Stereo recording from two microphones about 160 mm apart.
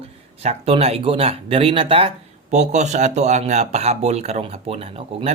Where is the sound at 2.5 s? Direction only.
45° right (ahead or behind).